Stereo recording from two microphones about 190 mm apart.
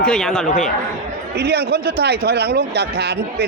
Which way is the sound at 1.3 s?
60° right (ahead or behind).